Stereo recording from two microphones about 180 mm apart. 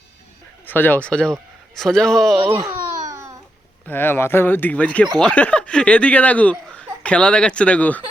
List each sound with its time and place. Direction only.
0.6 s speech: 10° left (ahead or behind)
2.5 s babbling: 15° right (ahead or behind)
3.8 s speech: 10° left (ahead or behind)